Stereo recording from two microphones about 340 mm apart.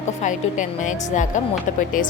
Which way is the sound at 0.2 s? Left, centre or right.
Left.